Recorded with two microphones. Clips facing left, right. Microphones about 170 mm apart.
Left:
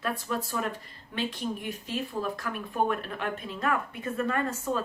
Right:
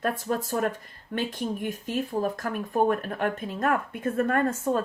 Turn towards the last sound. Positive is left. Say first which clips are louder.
# right 5 dB
turn(degrees=-50)  # may be behind; listen again after turning